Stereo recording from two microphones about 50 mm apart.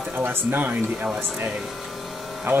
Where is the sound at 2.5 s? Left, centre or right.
Right.